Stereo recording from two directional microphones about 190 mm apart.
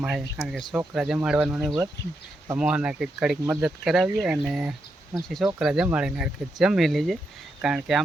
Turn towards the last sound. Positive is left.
turn(degrees=-5)  # may be behind; listen again after turning